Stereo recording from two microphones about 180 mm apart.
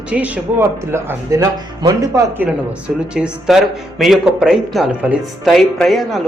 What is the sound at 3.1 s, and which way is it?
Speech, 5° right (ahead or behind).